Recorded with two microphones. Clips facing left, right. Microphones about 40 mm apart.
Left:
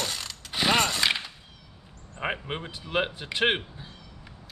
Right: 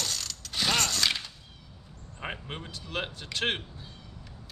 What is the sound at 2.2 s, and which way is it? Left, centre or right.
Speech, left.